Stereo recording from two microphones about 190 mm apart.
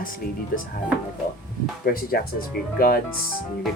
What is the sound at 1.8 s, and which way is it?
Speech, 50° left (ahead or behind).